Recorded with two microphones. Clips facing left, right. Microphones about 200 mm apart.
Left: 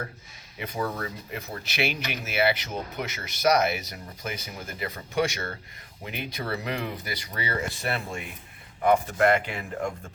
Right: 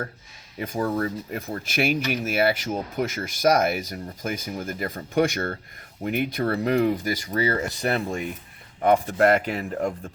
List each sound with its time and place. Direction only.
0.6 s speech: 45° right (ahead or behind)